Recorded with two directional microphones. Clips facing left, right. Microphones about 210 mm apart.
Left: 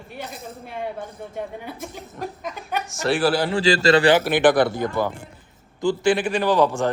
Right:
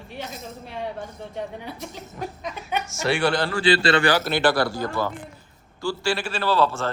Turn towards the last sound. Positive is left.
turn(degrees=15)  # may be behind; listen again after turning